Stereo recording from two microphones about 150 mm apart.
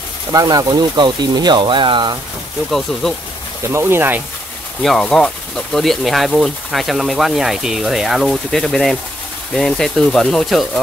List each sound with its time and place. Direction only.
0.3 s speech: 25° right (ahead or behind)
2.7 s speech: 5° left (ahead or behind)
3.7 s speech: 15° right (ahead or behind)
4.8 s speech: 5° left (ahead or behind)